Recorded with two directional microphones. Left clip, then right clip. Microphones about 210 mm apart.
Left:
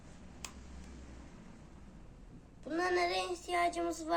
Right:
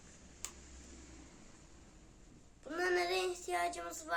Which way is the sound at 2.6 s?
20° right (ahead or behind).